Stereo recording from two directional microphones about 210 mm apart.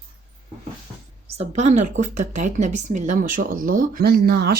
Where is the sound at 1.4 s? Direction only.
35° right (ahead or behind).